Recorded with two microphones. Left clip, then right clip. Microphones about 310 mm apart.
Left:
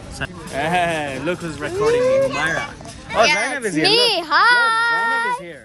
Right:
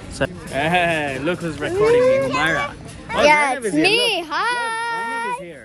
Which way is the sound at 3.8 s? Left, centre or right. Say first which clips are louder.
Left 2 dB; centre.